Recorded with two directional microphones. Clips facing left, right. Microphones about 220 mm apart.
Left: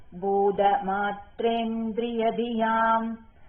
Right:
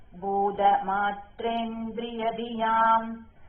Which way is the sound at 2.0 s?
25° left (ahead or behind).